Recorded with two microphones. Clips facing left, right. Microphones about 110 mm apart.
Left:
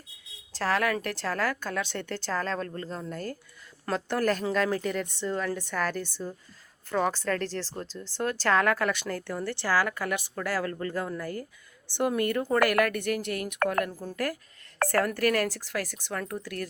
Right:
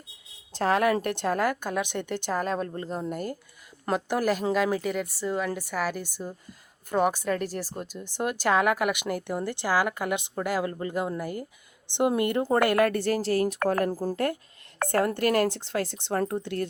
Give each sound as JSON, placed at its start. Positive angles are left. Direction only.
{"t": 0.5, "sound": "speech", "side_deg": -20}
{"t": 14.8, "sound": "speech", "side_deg": -20}